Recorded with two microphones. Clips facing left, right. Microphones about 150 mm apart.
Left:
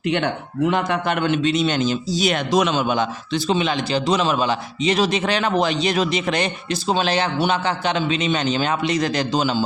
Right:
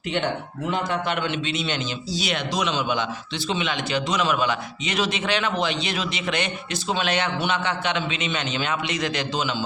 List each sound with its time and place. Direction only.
1.0 s a man's voice: 50° left (ahead or behind)